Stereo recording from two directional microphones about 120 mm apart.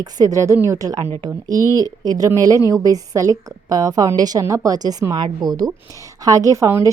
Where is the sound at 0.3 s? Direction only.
25° right (ahead or behind).